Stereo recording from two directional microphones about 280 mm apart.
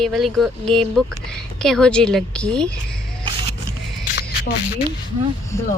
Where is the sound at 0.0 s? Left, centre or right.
Centre.